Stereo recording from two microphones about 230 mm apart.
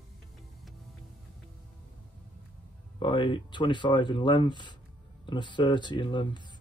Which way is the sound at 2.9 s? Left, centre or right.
Left.